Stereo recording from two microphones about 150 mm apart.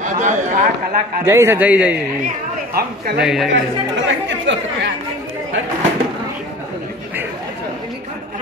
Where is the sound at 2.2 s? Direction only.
90° right.